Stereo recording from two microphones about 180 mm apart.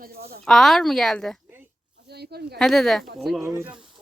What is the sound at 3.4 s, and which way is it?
Speech, 15° right (ahead or behind).